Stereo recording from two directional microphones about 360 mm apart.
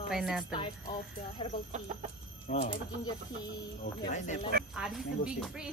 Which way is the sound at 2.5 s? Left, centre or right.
Centre.